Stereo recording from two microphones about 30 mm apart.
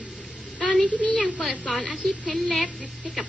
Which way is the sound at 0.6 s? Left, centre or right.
Centre.